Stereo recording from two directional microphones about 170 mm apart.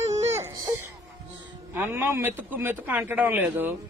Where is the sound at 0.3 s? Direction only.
20° right (ahead or behind).